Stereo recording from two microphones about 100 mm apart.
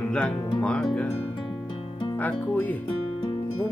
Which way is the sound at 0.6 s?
10° left (ahead or behind).